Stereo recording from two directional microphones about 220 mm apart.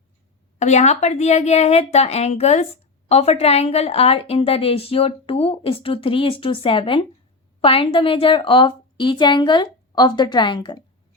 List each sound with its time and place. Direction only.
0.6 s a woman's voice: 30° left (ahead or behind)